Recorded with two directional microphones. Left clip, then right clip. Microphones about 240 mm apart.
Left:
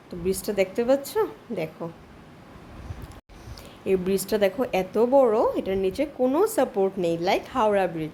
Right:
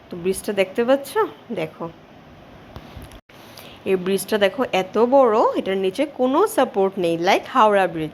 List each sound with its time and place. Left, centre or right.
0.1 s a woman's voice: centre
3.8 s a woman's voice: centre